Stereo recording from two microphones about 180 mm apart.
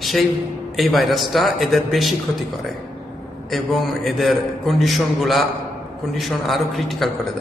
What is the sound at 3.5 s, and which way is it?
A man's voice, centre (ahead or behind).